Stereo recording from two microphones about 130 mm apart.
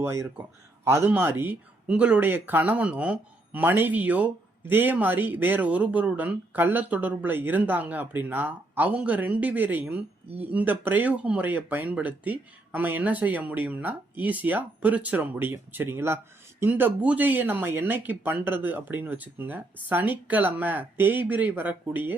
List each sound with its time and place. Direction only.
0.0 s a man's voice: 20° right (ahead or behind)